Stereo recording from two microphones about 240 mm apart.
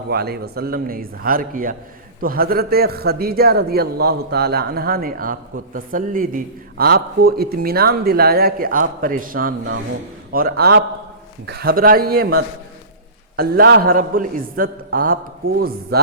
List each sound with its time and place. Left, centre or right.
0.1 s a man's voice: right